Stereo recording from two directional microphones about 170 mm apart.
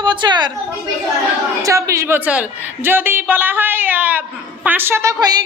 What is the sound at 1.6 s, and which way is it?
A man's voice, 20° right (ahead or behind).